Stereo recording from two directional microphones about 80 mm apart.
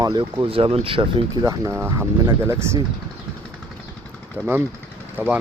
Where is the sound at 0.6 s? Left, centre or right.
Right.